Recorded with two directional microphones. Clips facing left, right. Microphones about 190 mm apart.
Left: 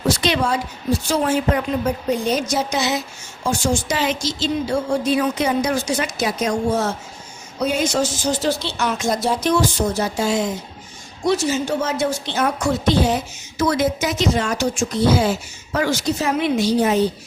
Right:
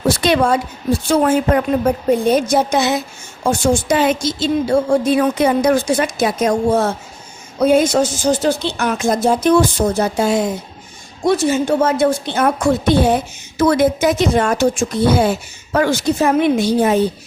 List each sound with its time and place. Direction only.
0.2 s a woman's voice: 50° right (ahead or behind)